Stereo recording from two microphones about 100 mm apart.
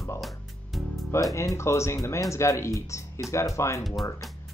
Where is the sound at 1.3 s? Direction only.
30° left (ahead or behind).